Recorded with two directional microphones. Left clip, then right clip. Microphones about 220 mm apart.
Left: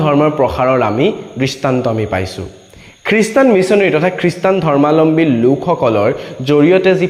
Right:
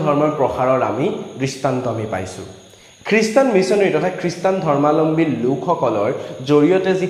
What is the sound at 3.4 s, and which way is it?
A man's voice, 35° left (ahead or behind).